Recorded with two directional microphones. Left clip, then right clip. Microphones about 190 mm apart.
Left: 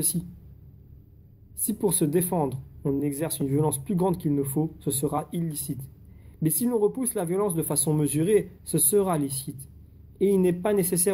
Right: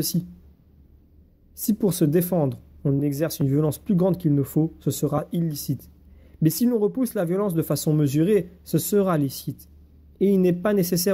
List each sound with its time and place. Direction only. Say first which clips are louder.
1.7 s speech: right 3 dB; 40° right (ahead or behind)